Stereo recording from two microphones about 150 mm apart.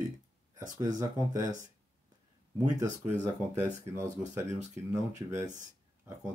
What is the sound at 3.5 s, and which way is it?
Speech, 15° right (ahead or behind).